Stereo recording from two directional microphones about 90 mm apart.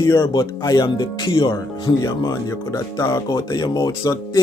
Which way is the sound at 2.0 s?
40° left (ahead or behind).